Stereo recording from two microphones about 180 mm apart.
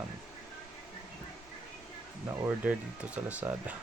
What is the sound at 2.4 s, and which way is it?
Speech, 5° right (ahead or behind).